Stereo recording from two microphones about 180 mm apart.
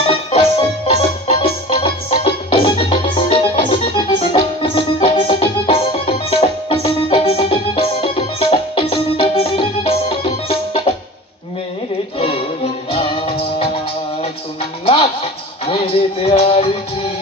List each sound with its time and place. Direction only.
0.0 s music: 30° left (ahead or behind)
12.9 s music: 30° left (ahead or behind)
15.6 s music: 30° left (ahead or behind)